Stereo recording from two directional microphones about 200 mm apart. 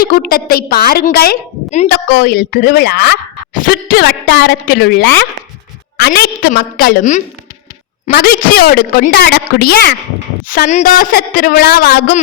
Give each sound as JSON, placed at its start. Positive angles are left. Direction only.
{"t": 0.0, "sound": "speech", "side_deg": 45}
{"t": 10.7, "sound": "speech", "side_deg": 40}